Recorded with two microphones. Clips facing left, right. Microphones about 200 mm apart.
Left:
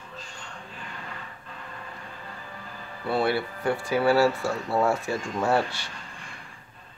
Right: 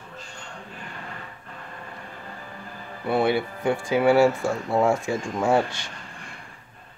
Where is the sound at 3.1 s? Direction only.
20° right (ahead or behind).